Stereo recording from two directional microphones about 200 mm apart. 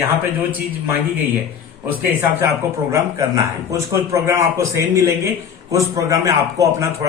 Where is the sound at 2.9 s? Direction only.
15° right (ahead or behind).